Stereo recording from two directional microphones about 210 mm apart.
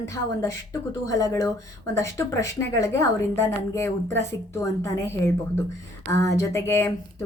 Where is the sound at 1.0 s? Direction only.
15° left (ahead or behind).